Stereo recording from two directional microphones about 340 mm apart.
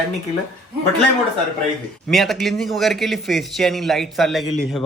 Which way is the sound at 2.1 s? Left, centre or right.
Centre.